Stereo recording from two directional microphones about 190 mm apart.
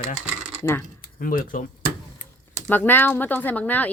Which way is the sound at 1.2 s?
45° left (ahead or behind).